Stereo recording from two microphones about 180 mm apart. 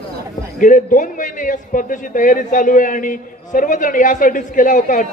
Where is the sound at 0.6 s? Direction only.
45° left (ahead or behind).